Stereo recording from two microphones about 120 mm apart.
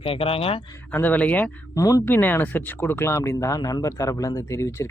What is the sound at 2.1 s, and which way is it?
Speech, 15° left (ahead or behind).